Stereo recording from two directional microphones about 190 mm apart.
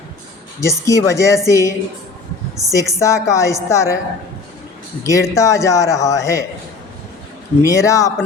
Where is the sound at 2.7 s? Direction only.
15° left (ahead or behind).